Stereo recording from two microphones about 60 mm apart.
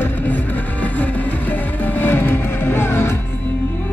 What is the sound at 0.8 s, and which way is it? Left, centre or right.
Music, left.